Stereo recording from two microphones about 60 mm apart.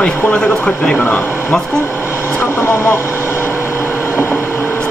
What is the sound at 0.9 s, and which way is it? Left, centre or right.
Speech, left.